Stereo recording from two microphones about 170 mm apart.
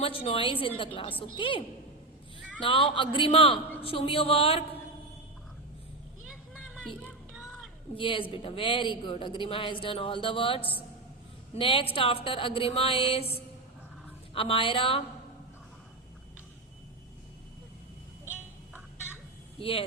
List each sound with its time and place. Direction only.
0.0 s a woman's voice: 35° left (ahead or behind)
2.6 s speech: 30° left (ahead or behind)
7.9 s speech: 30° left (ahead or behind)
19.5 s speech: 35° left (ahead or behind)